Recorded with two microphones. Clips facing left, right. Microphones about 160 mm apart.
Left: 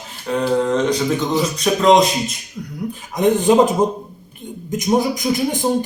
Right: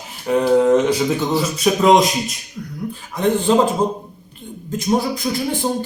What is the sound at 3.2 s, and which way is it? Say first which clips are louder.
Speech: left 2 dB; 15° left (ahead or behind).